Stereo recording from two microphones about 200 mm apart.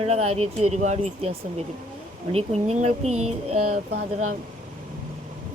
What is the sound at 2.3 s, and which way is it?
Speech, 30° right (ahead or behind).